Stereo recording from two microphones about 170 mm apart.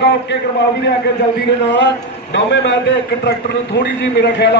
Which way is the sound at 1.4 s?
90° left.